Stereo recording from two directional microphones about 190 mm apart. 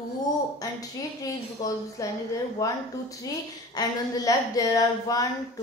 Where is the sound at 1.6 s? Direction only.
20° left (ahead or behind).